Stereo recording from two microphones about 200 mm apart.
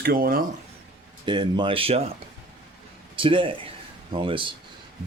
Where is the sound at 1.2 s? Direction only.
25° right (ahead or behind).